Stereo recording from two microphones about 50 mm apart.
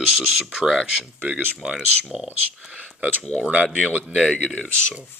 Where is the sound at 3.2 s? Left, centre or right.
Centre.